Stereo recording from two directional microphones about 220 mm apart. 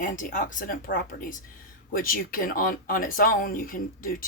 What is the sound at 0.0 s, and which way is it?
Speech, 35° left (ahead or behind).